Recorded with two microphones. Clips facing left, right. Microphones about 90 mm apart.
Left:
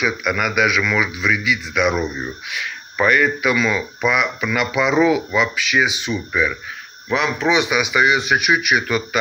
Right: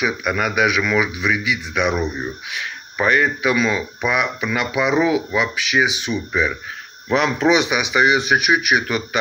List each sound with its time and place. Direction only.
0.2 s speech: 30° right (ahead or behind)
2.6 s speech: 30° right (ahead or behind)
7.1 s speech: 45° right (ahead or behind)
7.9 s speech: 25° right (ahead or behind)